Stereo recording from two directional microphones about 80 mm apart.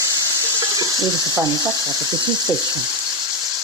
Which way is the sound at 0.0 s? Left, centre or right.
Right.